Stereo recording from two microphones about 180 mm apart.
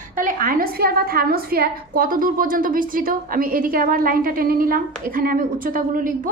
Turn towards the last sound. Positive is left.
turn(degrees=-50)  # may be behind; listen again after turning